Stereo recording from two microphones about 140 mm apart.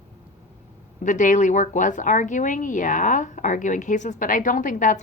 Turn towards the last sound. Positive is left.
turn(degrees=65)  # may be behind; listen again after turning